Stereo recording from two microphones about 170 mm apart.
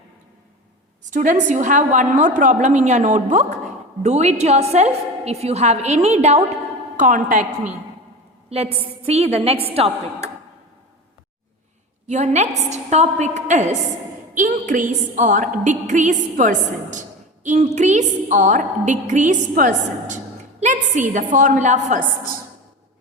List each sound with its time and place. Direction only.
1.0 s a woman's voice: 45° right (ahead or behind)
6.9 s a woman's voice: 50° right (ahead or behind)
8.4 s a woman's voice: 35° right (ahead or behind)
12.0 s a woman's voice: 40° right (ahead or behind)